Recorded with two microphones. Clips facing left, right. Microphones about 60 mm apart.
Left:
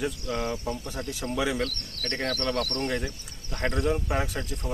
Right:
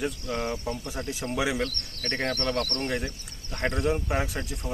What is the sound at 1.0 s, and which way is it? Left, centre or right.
Speech, right.